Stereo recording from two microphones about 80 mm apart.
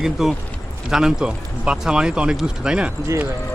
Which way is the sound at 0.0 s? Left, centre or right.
Centre.